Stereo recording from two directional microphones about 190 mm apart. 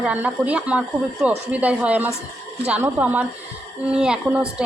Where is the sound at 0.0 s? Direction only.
5° right (ahead or behind).